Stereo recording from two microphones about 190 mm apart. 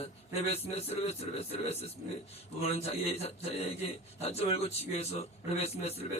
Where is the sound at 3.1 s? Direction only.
30° left (ahead or behind).